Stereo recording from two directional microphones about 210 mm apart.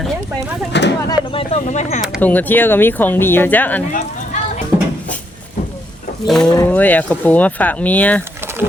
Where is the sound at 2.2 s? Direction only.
10° left (ahead or behind).